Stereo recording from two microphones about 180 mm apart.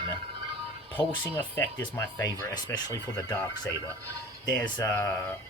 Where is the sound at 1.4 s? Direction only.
15° left (ahead or behind).